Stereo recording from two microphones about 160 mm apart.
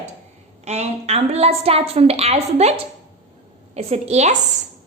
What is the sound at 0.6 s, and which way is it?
A woman's voice, 45° right (ahead or behind).